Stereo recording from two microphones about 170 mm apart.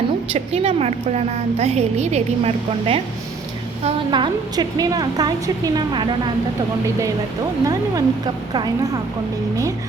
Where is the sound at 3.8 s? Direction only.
30° right (ahead or behind).